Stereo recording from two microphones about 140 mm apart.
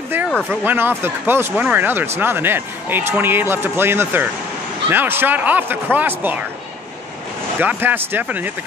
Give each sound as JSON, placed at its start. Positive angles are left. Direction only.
{"t": 0.5, "sound": "speech", "side_deg": -15}
{"t": 7.6, "sound": "speech", "side_deg": -15}